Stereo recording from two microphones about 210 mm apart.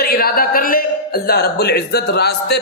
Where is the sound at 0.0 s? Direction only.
45° left (ahead or behind).